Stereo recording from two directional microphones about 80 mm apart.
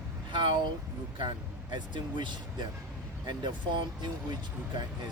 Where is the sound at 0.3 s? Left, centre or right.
Right.